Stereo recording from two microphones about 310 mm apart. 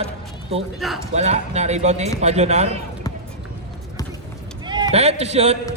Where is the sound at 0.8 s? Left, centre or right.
Centre.